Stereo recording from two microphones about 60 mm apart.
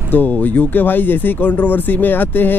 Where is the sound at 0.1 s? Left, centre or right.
Left.